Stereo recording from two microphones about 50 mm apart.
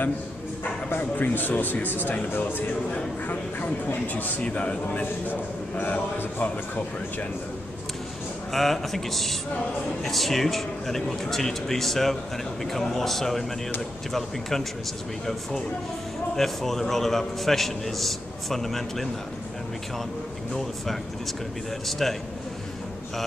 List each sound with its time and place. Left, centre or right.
0.8 s a man's voice: left
8.5 s a man's voice: centre
16.3 s a man's voice: centre
20.5 s a man's voice: centre